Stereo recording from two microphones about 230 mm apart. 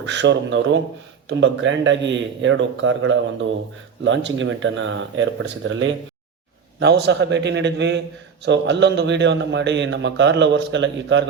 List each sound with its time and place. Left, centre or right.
0.0 s a man's voice: right